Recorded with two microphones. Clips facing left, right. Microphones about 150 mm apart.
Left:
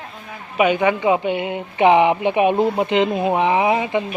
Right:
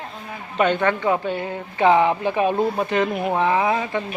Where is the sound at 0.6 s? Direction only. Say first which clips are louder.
Left 3 dB; 10° left (ahead or behind).